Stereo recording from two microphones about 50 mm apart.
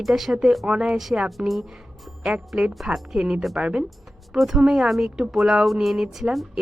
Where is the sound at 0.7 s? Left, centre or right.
Right.